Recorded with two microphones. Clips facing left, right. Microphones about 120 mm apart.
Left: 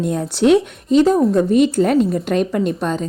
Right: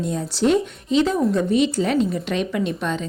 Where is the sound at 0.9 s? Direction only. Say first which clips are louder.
Left 6 dB; 45° left (ahead or behind).